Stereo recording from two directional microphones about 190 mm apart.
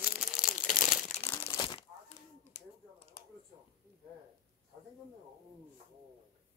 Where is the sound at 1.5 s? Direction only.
25° left (ahead or behind).